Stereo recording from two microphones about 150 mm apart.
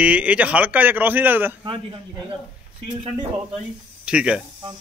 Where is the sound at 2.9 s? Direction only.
30° right (ahead or behind).